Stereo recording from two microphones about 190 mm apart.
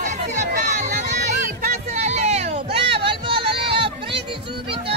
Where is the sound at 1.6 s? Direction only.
40° right (ahead or behind).